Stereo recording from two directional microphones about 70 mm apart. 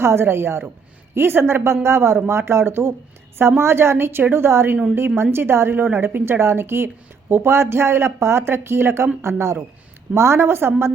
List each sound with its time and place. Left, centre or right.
0.0 s a woman's voice: right